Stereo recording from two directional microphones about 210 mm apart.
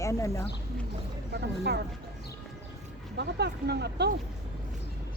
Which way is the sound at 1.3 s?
50° right (ahead or behind).